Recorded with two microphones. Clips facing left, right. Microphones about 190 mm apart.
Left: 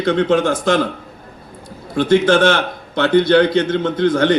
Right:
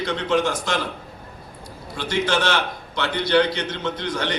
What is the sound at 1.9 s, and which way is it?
A man's voice, 55° left (ahead or behind).